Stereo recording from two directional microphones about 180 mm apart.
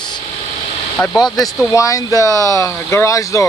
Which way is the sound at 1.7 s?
20° left (ahead or behind).